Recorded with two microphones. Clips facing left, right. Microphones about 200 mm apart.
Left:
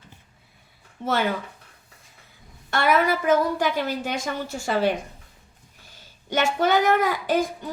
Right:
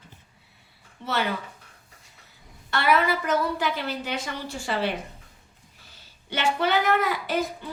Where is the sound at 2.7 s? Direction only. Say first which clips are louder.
Left 2 dB; 45° left (ahead or behind).